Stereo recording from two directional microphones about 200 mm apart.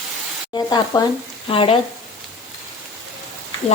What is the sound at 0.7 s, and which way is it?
Speech, 20° left (ahead or behind).